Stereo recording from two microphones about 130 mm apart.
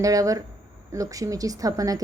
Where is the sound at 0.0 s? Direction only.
25° right (ahead or behind).